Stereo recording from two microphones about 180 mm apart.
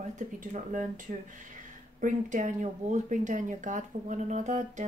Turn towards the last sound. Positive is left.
turn(degrees=-40)  # may be behind; listen again after turning